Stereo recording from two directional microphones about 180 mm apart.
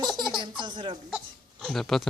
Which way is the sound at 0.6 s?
25° right (ahead or behind).